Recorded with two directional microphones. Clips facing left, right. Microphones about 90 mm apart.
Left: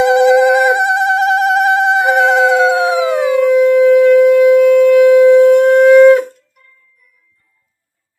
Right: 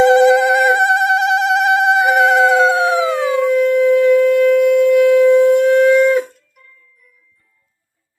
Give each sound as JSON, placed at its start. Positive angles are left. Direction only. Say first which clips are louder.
{"t": 0.0, "sound": "telephone", "louder": "left 1 dB", "side_deg": 15}
{"t": 3.3, "sound": "sine wave", "louder": "left 5 dB", "side_deg": 85}